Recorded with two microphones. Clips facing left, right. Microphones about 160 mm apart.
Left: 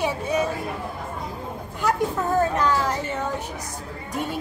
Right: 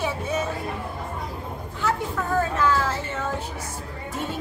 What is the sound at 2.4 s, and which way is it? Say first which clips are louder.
A woman's voice: even; 15° left (ahead or behind).